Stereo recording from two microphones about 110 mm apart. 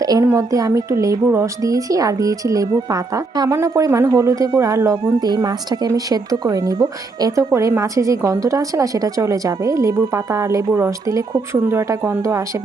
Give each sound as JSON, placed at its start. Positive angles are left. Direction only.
{"t": 0.0, "sound": "a woman's voice", "side_deg": -35}
{"t": 3.5, "sound": "speech", "side_deg": -25}